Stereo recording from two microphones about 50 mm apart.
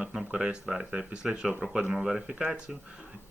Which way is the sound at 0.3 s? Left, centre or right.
Centre.